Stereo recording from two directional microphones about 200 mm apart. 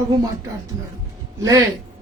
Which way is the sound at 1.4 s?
15° right (ahead or behind).